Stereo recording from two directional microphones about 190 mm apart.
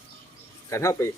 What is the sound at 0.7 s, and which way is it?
Speech, 15° left (ahead or behind).